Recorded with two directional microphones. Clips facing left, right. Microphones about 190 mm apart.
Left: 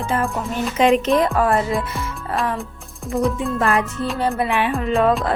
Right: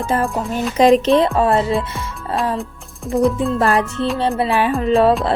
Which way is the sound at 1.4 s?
25° right (ahead or behind).